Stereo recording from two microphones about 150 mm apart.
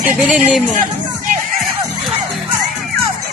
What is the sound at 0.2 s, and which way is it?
Speech, 5° right (ahead or behind).